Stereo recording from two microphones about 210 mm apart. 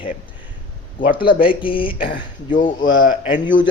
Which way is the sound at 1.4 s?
25° left (ahead or behind).